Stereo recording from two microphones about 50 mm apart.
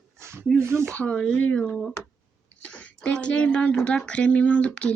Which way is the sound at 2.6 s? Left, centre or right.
Left.